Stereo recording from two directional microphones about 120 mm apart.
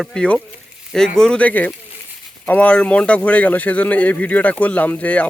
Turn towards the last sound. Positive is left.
turn(degrees=10)  # may be behind; listen again after turning